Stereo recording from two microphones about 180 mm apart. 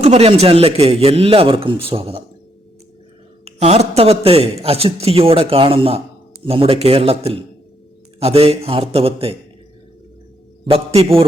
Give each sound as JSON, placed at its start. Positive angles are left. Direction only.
{"t": 0.0, "sound": "a man's voice", "side_deg": -35}
{"t": 3.4, "sound": "a man's voice", "side_deg": -35}
{"t": 10.7, "sound": "a man's voice", "side_deg": -30}